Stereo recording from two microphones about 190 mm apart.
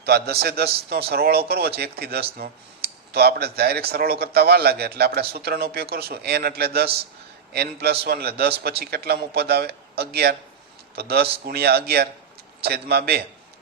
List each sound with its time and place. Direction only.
0.0 s a man's voice: 55° right (ahead or behind)